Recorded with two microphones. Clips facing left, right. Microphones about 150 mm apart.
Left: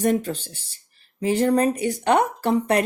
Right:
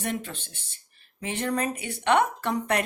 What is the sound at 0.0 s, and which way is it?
A woman's voice, 40° left (ahead or behind).